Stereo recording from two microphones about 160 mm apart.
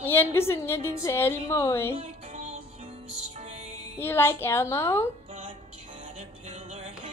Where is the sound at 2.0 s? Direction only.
45° right (ahead or behind).